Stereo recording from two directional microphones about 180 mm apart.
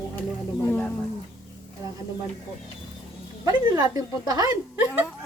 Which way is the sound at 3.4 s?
20° right (ahead or behind).